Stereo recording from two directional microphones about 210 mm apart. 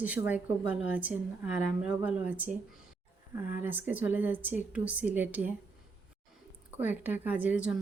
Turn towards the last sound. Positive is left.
turn(degrees=-5)  # may be behind; listen again after turning